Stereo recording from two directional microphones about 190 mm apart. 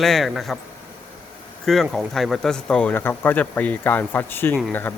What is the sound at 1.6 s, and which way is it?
Speech, centre (ahead or behind).